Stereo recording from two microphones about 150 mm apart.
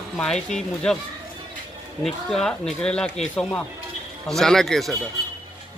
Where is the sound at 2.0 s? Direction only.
5° left (ahead or behind).